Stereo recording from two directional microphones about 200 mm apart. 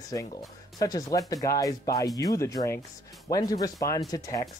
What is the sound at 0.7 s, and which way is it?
Speech, 20° left (ahead or behind).